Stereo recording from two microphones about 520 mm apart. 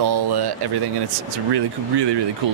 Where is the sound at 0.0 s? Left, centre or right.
Right.